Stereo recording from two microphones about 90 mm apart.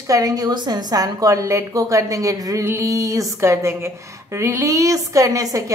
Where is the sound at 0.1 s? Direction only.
45° right (ahead or behind).